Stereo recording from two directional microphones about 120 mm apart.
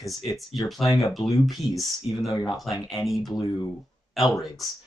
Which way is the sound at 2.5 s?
Centre (ahead or behind).